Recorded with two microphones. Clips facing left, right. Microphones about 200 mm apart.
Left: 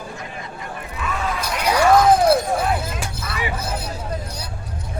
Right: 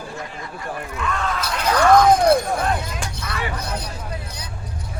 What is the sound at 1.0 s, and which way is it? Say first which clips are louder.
Shatter: even; 5° left (ahead or behind).